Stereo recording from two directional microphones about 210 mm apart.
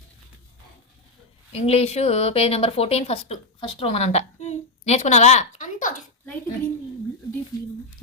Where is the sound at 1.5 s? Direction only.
30° left (ahead or behind).